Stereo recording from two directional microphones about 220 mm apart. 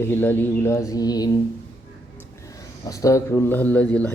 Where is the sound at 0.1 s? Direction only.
10° left (ahead or behind).